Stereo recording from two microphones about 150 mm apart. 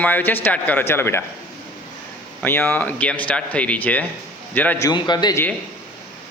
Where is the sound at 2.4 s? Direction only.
15° left (ahead or behind).